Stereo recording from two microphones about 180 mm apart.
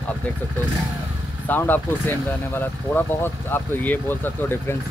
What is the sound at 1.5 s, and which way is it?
Speech, 10° left (ahead or behind).